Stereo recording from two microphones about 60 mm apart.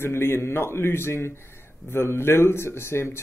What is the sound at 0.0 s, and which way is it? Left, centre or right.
Speech, left.